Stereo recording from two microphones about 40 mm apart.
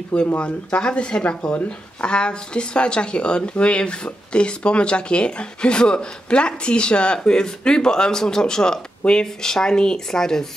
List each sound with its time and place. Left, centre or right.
0.4 s speech: left